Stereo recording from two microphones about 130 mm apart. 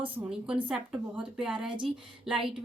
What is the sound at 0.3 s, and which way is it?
A woman's voice, 5° right (ahead or behind).